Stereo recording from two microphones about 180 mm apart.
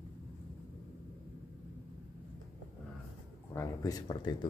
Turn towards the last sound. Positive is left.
turn(degrees=25)  # may be behind; listen again after turning